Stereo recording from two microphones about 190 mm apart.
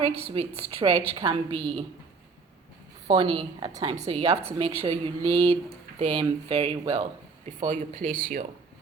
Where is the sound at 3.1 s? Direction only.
20° right (ahead or behind).